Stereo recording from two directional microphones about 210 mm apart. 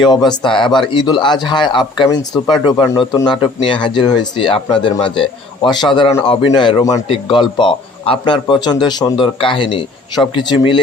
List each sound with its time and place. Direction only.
0.1 s speech: 20° left (ahead or behind)